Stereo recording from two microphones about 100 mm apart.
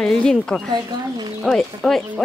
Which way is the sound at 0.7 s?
45° right (ahead or behind).